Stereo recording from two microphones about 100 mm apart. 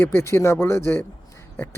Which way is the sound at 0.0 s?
25° left (ahead or behind).